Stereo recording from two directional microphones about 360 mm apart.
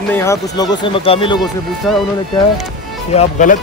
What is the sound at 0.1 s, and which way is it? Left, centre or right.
Speech, centre.